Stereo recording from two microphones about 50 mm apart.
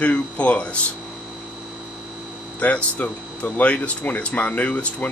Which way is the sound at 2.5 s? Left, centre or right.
Left.